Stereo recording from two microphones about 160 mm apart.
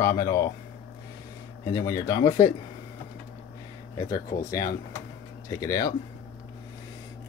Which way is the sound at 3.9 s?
20° left (ahead or behind).